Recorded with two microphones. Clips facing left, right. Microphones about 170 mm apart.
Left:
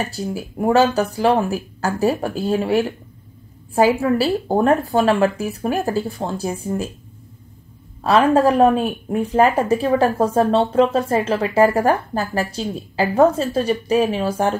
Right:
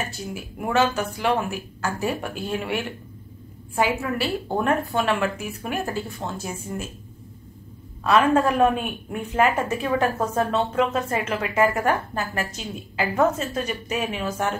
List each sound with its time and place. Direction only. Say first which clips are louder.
0.0 s a woman's voice: left 7 dB; 35° left (ahead or behind)
8.0 s a woman's voice: left 4 dB; 35° left (ahead or behind)